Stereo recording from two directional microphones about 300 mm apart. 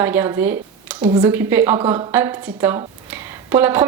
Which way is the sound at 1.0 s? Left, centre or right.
Centre.